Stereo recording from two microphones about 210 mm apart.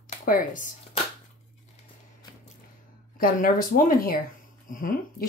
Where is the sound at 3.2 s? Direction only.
40° left (ahead or behind).